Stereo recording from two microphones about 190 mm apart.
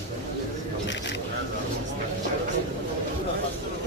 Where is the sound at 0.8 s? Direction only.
70° left (ahead or behind).